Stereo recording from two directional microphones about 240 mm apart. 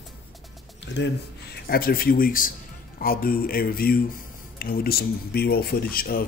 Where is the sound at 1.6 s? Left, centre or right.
Left.